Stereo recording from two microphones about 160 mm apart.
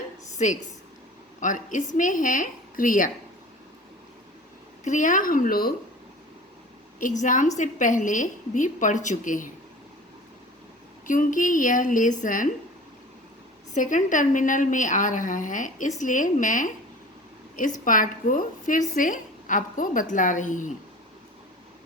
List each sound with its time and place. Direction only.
1.4 s a woman's voice: 55° left (ahead or behind)
4.8 s a woman's voice: 50° left (ahead or behind)
7.2 s a woman's voice: 50° left (ahead or behind)
11.0 s a woman's voice: 55° left (ahead or behind)
13.7 s a woman's voice: 55° left (ahead or behind)